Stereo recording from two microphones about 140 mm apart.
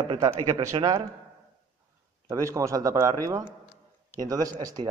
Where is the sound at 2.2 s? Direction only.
25° right (ahead or behind).